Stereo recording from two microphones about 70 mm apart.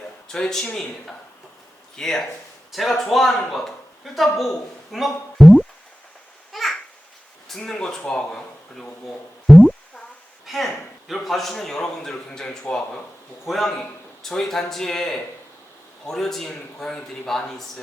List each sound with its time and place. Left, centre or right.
0.3 s speech: centre
4.9 s a sound: centre
6.5 s babbling: centre
7.4 s speech: centre
9.5 s a sound: centre
11.1 s speech: centre
13.4 s speech: centre